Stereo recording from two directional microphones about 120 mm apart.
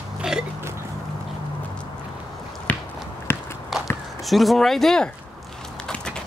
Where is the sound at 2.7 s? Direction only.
10° left (ahead or behind).